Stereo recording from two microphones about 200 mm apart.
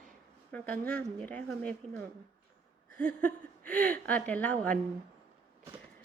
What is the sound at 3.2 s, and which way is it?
A woman's voice, 5° left (ahead or behind).